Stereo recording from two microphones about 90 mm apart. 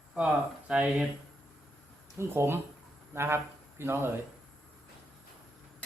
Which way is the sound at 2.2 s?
30° right (ahead or behind).